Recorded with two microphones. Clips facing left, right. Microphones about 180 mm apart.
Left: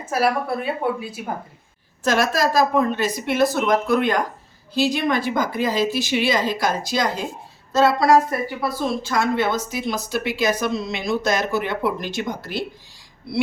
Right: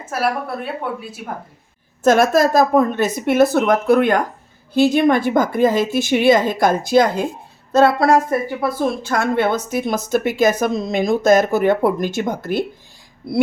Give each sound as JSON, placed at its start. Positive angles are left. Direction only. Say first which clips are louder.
{"t": 0.0, "sound": "a woman's voice", "louder": "left 1 dB", "side_deg": 0}
{"t": 2.0, "sound": "a woman's voice", "louder": "right 6 dB", "side_deg": -50}